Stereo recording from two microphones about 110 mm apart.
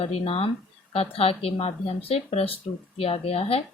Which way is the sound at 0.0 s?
65° left (ahead or behind).